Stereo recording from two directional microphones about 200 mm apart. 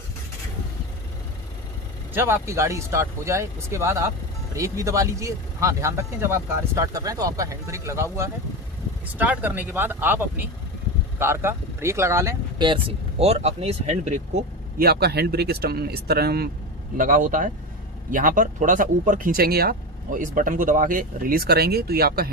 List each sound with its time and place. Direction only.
2.1 s speech: 10° right (ahead or behind); by 14.2 s 35° right (ahead or behind)
14.8 s speech: 55° right (ahead or behind)
17.0 s speech: 40° right (ahead or behind)